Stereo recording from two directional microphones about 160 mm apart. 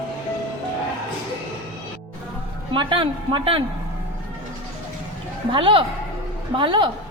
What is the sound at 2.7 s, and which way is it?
Speech, 30° right (ahead or behind).